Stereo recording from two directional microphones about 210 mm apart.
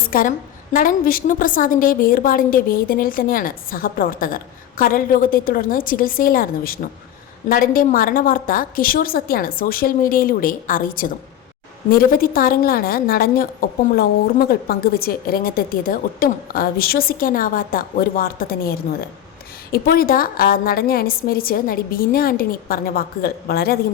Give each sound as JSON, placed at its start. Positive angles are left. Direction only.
{"t": 0.1, "sound": "a woman's voice", "side_deg": 40}